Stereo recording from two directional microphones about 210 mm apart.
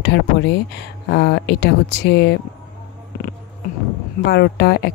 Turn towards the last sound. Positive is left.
turn(degrees=55)  # may be behind; listen again after turning